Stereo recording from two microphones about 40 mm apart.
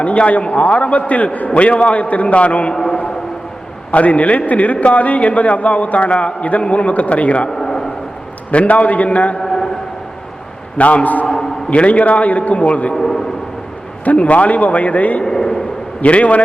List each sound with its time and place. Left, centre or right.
0.0 s a man's voice: left
3.9 s a man's voice: left
7.5 s a sound: centre
8.4 s a man's voice: left
9.4 s a sound: centre
10.8 s a man's voice: left
12.9 s a man's voice: centre
14.0 s a man's voice: left
15.2 s a sound: centre
16.0 s a man's voice: left